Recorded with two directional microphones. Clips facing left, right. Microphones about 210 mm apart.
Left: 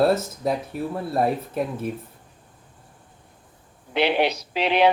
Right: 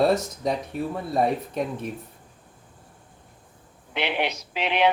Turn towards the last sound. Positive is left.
turn(degrees=35)  # may be behind; listen again after turning